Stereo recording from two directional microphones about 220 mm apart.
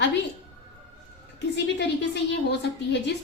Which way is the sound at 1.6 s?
55° left (ahead or behind).